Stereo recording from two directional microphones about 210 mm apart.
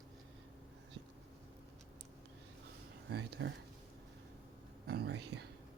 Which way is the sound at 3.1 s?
50° right (ahead or behind).